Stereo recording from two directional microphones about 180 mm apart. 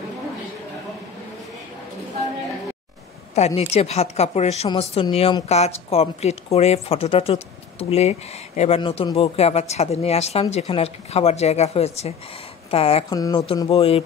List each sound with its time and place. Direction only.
3.3 s a woman's voice: 35° left (ahead or behind)
13.1 s speech: 20° left (ahead or behind)
13.7 s a woman's voice: 35° left (ahead or behind)